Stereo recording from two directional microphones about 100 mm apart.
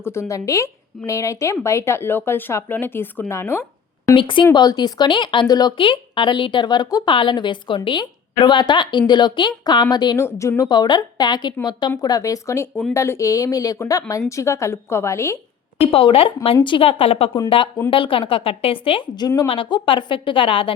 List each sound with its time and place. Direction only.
0.0 s speech: 25° left (ahead or behind)
4.1 s a woman's voice: 60° left (ahead or behind)
4.5 s speech: 45° left (ahead or behind)
10.2 s speech: 30° left (ahead or behind)
10.6 s a woman's voice: 45° left (ahead or behind); by 15.4 s 30° left (ahead or behind)
15.9 s speech: 70° left (ahead or behind)
17.9 s a woman's voice: 60° left (ahead or behind)